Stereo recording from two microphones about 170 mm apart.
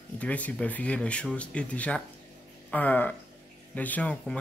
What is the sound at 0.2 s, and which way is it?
Speech, 10° left (ahead or behind).